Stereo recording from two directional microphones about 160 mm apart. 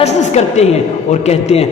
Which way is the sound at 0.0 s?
45° left (ahead or behind).